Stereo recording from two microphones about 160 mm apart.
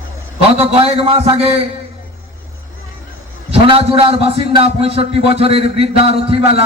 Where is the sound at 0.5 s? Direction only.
40° right (ahead or behind).